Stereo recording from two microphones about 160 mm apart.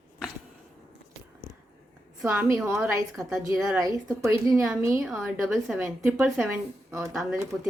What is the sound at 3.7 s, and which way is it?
A woman's voice, 20° right (ahead or behind).